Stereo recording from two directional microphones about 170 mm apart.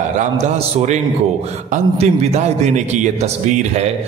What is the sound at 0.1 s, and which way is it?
A man's voice, 45° right (ahead or behind).